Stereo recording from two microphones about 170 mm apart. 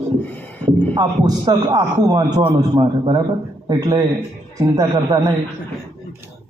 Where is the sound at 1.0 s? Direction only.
25° right (ahead or behind).